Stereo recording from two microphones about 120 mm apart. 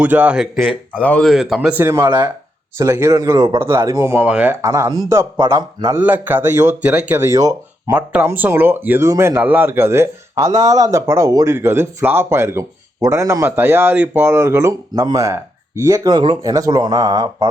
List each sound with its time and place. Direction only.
0.0 s speech: 10° right (ahead or behind)
1.0 s speech: 10° left (ahead or behind)
1.3 s speech: 5° right (ahead or behind)
1.8 s speech: 20° right (ahead or behind)
2.0 s speech: 40° right (ahead or behind)
2.7 s speech: 25° right (ahead or behind)
4.6 s speech: 30° right (ahead or behind)
6.0 s speech: 15° right (ahead or behind)
7.3 s speech: 30° right (ahead or behind)
7.9 s speech: 15° right (ahead or behind)
16.1 s speech: 40° right (ahead or behind)